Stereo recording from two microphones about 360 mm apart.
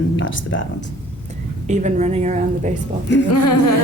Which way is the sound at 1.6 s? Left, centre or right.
Centre.